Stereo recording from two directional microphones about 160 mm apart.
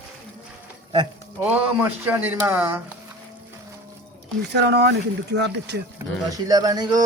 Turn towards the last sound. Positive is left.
turn(degrees=-25)  # may be behind; listen again after turning